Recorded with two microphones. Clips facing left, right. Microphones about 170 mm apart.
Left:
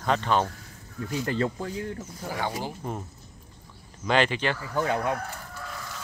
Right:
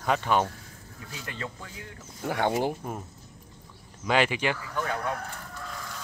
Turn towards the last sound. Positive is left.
turn(degrees=25)  # may be behind; listen again after turning